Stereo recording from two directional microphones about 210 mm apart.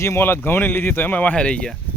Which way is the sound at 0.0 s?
10° left (ahead or behind).